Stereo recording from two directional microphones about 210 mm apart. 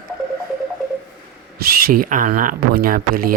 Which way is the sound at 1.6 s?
40° right (ahead or behind).